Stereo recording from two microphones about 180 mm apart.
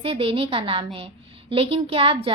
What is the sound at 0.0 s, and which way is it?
A woman's voice, 30° right (ahead or behind).